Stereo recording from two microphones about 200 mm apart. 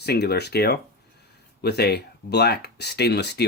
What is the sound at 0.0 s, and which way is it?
Speech, 55° left (ahead or behind).